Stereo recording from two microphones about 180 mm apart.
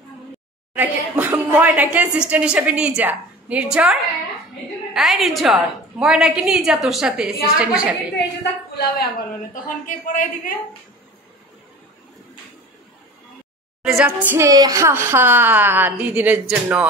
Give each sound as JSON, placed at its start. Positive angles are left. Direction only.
{"t": 0.7, "sound": "a woman's voice", "side_deg": -10}
{"t": 8.7, "sound": "a woman's voice", "side_deg": 60}
{"t": 13.8, "sound": "a woman's voice", "side_deg": -5}